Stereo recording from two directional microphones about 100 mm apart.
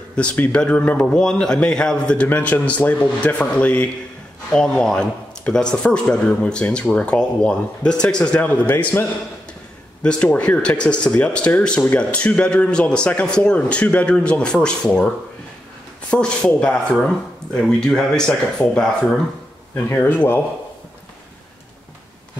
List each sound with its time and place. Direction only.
0.1 s speech: 10° left (ahead or behind)
10.0 s speech: 15° left (ahead or behind)
19.7 s speech: 20° left (ahead or behind)